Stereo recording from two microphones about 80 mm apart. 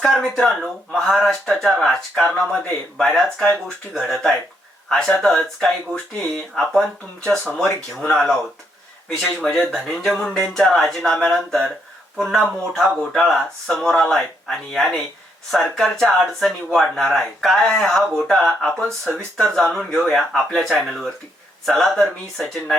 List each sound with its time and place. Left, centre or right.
0.2 s speech: centre